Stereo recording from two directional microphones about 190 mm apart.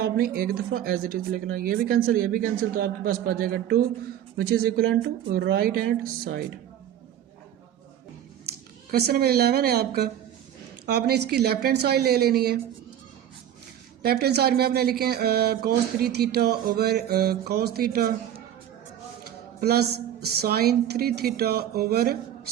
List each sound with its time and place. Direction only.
0.0 s speech: 50° right (ahead or behind)
8.9 s speech: 55° right (ahead or behind)
14.0 s speech: 55° right (ahead or behind)
19.2 s speech: 55° right (ahead or behind)